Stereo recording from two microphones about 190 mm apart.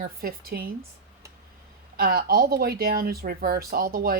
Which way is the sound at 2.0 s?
55° right (ahead or behind).